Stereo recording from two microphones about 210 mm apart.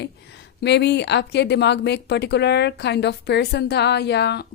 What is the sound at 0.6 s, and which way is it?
Speech, 55° left (ahead or behind).